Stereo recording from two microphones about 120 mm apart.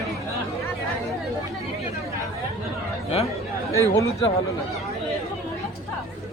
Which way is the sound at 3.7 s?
25° left (ahead or behind).